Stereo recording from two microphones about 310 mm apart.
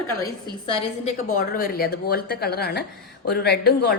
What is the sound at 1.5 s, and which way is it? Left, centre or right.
A woman's voice, left.